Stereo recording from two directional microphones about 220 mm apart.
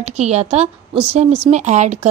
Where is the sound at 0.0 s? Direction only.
30° right (ahead or behind).